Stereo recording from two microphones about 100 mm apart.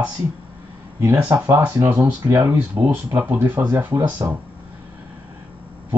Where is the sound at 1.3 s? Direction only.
25° right (ahead or behind).